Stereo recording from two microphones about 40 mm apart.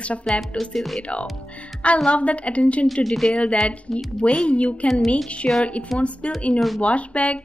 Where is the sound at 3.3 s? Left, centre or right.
Left.